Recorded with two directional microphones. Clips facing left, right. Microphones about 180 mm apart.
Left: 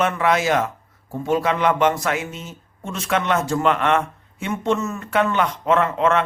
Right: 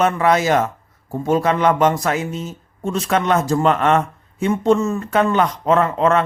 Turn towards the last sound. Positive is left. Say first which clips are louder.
# right 2 dB
turn(degrees=-35)  # may be behind; listen again after turning